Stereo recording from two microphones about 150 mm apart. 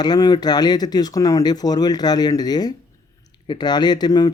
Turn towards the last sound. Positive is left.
turn(degrees=25)  # may be behind; listen again after turning